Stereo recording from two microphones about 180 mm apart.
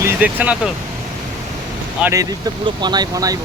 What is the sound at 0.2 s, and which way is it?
Speech, 5° right (ahead or behind).